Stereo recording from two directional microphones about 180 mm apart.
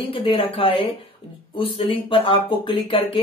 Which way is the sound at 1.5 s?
30° left (ahead or behind).